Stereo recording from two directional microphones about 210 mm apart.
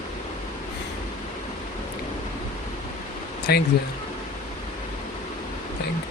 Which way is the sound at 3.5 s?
50° left (ahead or behind).